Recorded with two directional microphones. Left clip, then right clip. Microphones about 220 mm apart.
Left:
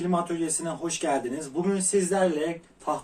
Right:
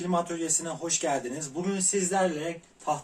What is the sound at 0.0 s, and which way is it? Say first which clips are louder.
Speech: left 2 dB; 15° right (ahead or behind).